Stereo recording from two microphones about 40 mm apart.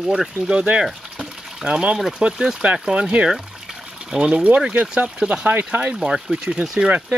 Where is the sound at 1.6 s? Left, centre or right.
Right.